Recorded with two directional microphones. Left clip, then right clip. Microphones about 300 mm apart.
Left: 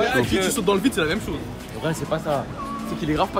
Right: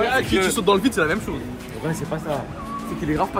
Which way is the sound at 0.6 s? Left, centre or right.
Centre.